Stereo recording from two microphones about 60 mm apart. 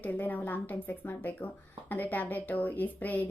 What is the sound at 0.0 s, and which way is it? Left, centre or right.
A woman's voice, left.